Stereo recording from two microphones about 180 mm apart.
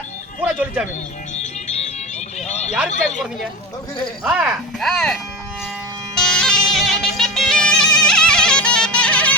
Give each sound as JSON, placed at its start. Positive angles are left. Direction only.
{"t": 0.4, "sound": "speech", "side_deg": -10}
{"t": 2.5, "sound": "a sound", "side_deg": 40}
{"t": 4.2, "sound": "speech", "side_deg": -5}
{"t": 6.1, "sound": "music", "side_deg": 5}